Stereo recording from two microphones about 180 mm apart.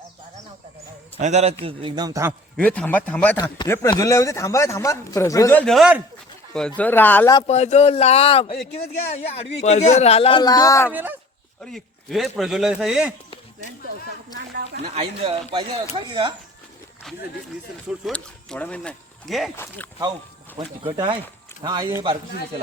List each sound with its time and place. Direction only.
1.2 s speech: 40° right (ahead or behind)
1.6 s a man's voice: 25° right (ahead or behind)
2.6 s speech: 10° left (ahead or behind)
3.3 s speech: 25° left (ahead or behind)
7.4 s speech: 40° left (ahead or behind); by 10.9 s 15° left (ahead or behind)
10.9 s speech: 10° right (ahead or behind)
11.6 s a man's voice: centre (ahead or behind)
14.8 s a man's voice: 35° right (ahead or behind)
18.0 s a man's voice: 5° left (ahead or behind)
19.5 s speech: 15° left (ahead or behind)
20.6 s a man's voice: 25° right (ahead or behind)